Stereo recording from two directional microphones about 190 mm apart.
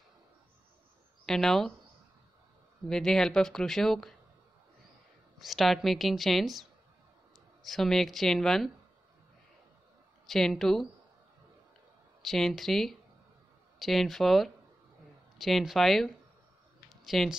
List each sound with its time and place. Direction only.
1.2 s speech: centre (ahead or behind)
2.9 s speech: 5° left (ahead or behind)
5.4 s speech: centre (ahead or behind)
10.2 s speech: centre (ahead or behind)
12.3 s speech: centre (ahead or behind)